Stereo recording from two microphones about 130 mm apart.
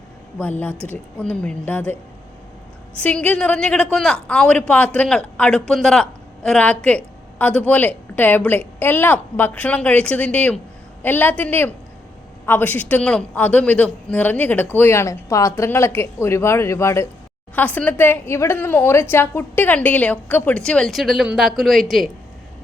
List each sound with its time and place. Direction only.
0.6 s a woman's voice: 10° left (ahead or behind)
3.0 s a woman's voice: 10° left (ahead or behind)